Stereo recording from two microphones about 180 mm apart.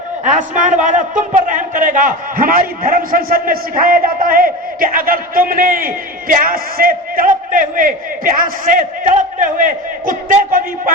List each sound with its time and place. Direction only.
0.3 s a man's voice: 45° right (ahead or behind)